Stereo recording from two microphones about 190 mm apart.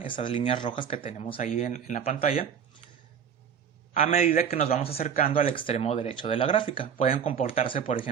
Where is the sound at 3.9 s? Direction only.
30° left (ahead or behind).